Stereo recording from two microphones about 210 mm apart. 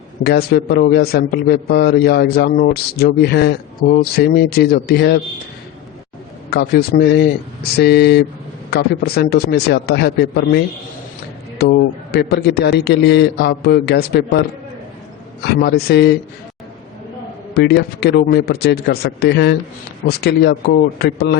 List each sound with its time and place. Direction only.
0.2 s a man's voice: 50° left (ahead or behind)
6.5 s a man's voice: 50° left (ahead or behind)
15.4 s a man's voice: 50° left (ahead or behind)
17.5 s a man's voice: 50° left (ahead or behind)